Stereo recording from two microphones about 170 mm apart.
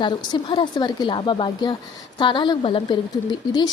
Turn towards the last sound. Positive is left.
turn(degrees=25)  # may be behind; listen again after turning